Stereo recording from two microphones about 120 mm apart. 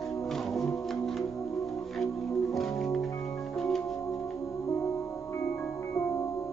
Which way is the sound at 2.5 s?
Centre (ahead or behind).